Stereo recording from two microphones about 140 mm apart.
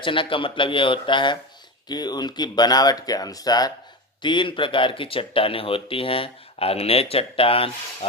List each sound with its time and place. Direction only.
0.0 s speech: 35° left (ahead or behind)